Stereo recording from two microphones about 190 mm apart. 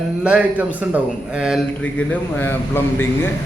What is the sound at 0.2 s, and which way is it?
A man's voice, 5° right (ahead or behind).